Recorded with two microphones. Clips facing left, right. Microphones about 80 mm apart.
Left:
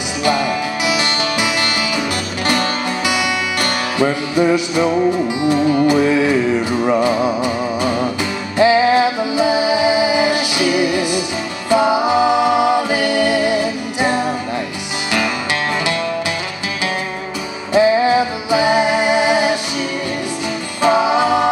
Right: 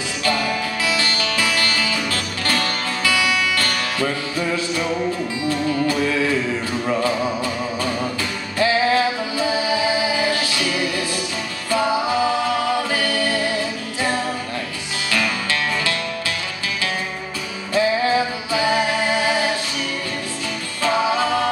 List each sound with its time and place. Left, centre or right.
0.2 s music: centre
11.7 s a capella: centre
17.7 s music: centre
20.8 s music: centre